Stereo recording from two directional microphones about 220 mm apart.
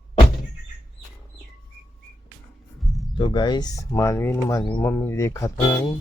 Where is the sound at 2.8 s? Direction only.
Centre (ahead or behind).